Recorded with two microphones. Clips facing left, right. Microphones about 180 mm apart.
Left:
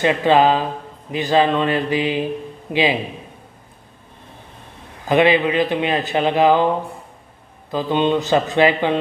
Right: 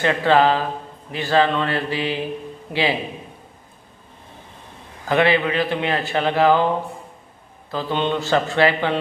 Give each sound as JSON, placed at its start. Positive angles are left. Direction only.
{"t": 0.0, "sound": "a man's voice", "side_deg": 15}
{"t": 5.0, "sound": "a man's voice", "side_deg": 20}
{"t": 7.7, "sound": "a man's voice", "side_deg": 15}